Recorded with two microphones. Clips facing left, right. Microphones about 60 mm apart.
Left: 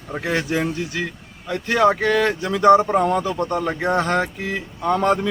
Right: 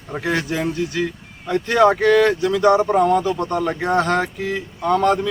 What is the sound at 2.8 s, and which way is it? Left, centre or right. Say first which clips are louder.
Speech: right 3 dB; centre.